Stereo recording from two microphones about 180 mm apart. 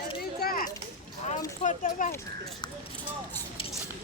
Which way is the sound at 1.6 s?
45° left (ahead or behind).